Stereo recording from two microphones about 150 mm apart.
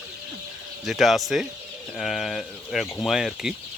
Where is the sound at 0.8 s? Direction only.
Centre (ahead or behind).